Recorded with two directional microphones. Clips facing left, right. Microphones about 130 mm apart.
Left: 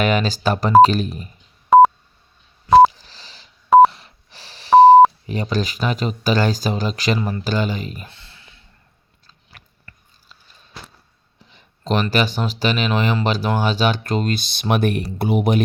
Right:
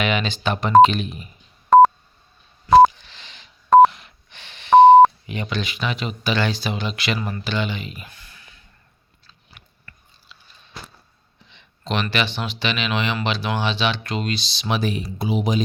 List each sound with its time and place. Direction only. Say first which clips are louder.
0.0 s speech: left 4 dB; 40° left (ahead or behind)
1.7 s sidetone: left 1 dB; 5° left (ahead or behind)
2.9 s telephone dialing: left 1 dB; 35° left (ahead or behind)
3.7 s sidetone: left 1 dB; 5° left (ahead or behind)
3.9 s wheeze: left 1 dB; 35° left (ahead or behind)
4.8 s telephone dialing: left 1 dB; 35° left (ahead or behind)
5.2 s speech: left 5 dB; 35° left (ahead or behind)
7.2 s speech: left 4 dB; 25° left (ahead or behind)
7.4 s speech: left 4 dB; 40° left (ahead or behind)
8.1 s a sound: even; 25° left (ahead or behind)
9.6 s chewing: left 1 dB; 40° left (ahead or behind)
11.4 s a sound: left 5 dB; 40° left (ahead or behind)
12.1 s speech: left 4 dB; 40° left (ahead or behind); by 15.6 s 60° left (ahead or behind)